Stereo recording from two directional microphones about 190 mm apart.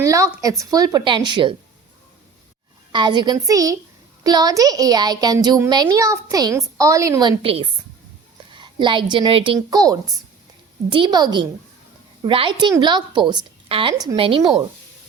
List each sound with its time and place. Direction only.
0.0 s a woman's voice: 15° right (ahead or behind)
2.9 s a woman's voice: 25° right (ahead or behind)